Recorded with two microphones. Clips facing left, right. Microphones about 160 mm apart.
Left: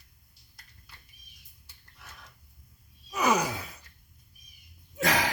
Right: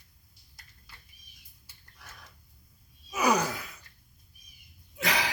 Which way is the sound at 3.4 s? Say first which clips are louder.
Left 1 dB; 25° left (ahead or behind).